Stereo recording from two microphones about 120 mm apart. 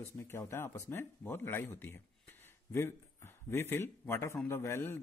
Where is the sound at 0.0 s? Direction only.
20° left (ahead or behind).